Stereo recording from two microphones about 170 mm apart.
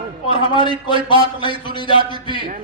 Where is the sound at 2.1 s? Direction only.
25° left (ahead or behind).